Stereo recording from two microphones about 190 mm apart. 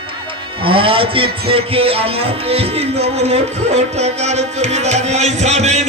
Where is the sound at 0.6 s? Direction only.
30° right (ahead or behind).